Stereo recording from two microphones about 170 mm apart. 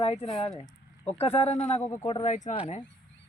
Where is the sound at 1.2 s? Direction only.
35° left (ahead or behind).